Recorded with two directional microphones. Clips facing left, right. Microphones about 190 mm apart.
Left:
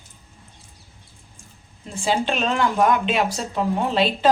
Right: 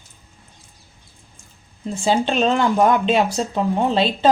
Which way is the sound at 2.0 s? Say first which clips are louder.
Right 4 dB; 30° right (ahead or behind).